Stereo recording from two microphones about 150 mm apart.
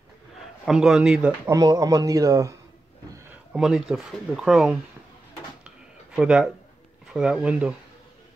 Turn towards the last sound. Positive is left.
turn(degrees=-5)  # may be behind; listen again after turning